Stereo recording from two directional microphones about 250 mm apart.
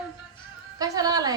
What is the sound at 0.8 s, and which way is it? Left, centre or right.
Music, centre.